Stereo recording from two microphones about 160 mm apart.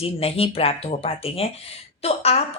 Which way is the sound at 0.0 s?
35° left (ahead or behind).